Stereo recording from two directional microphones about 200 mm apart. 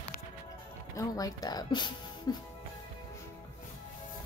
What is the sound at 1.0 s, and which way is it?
Speech, 20° left (ahead or behind).